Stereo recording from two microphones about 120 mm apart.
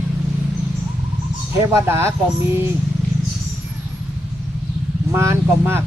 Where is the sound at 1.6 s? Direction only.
20° right (ahead or behind).